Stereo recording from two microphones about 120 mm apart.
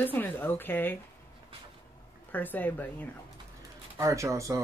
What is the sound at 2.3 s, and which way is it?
Speech, 15° left (ahead or behind).